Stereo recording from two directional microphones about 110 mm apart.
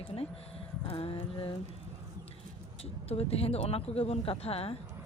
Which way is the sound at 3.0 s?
65° left (ahead or behind).